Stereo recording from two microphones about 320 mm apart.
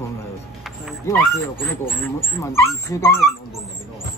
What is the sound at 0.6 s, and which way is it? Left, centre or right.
Speech, centre.